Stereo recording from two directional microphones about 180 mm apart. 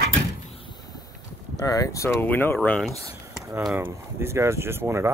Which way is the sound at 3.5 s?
10° right (ahead or behind).